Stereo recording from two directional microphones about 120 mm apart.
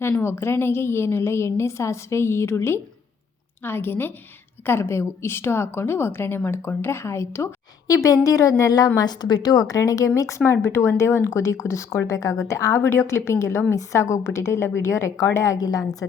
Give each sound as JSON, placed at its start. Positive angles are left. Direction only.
{"t": 0.0, "sound": "a woman's voice", "side_deg": 20}